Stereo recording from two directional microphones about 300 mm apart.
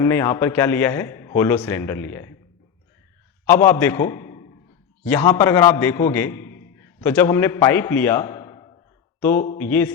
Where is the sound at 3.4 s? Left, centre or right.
Centre.